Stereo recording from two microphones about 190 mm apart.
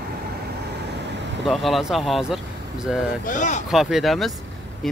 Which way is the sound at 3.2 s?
40° left (ahead or behind).